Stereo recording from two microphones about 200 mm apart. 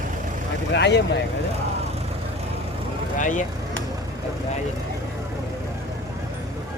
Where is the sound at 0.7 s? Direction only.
55° left (ahead or behind).